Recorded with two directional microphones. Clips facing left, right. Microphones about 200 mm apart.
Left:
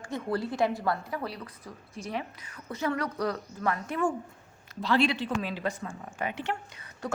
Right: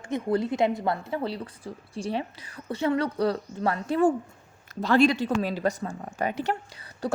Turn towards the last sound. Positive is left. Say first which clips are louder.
# right 5 dB
turn(degrees=-35)  # may be behind; listen again after turning